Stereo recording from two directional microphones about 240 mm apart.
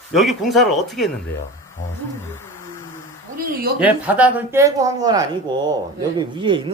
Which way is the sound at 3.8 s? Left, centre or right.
Centre.